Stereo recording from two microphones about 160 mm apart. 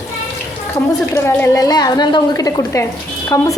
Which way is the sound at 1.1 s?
20° left (ahead or behind).